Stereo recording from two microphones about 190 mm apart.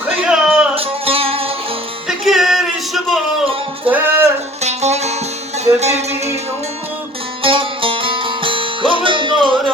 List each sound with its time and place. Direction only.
0.3 s music: 5° right (ahead or behind)
0.8 s music: 30° right (ahead or behind)
2.0 s music: centre (ahead or behind)
4.6 s music: 35° right (ahead or behind)
7.4 s music: 30° right (ahead or behind)